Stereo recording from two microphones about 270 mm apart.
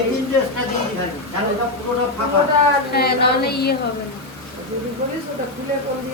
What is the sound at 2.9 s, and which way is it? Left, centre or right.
Speech, left.